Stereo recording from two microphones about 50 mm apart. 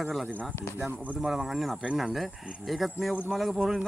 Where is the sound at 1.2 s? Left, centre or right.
Centre.